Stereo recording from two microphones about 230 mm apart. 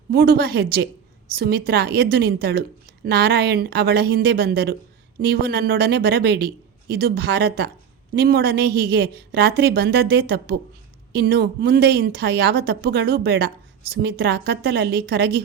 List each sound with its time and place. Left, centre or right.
0.1 s a woman's voice: right